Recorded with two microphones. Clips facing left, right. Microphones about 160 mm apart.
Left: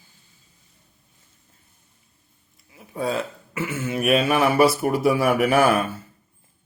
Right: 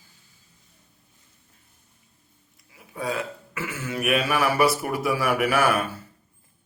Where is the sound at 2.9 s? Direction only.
30° left (ahead or behind).